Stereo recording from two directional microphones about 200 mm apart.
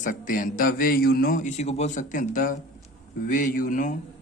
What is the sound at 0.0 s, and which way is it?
A man's voice, 45° left (ahead or behind).